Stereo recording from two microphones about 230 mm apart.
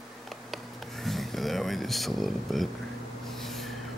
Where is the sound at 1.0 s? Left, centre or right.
Centre.